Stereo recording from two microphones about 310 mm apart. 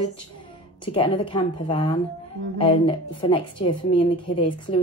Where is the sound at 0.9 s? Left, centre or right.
Centre.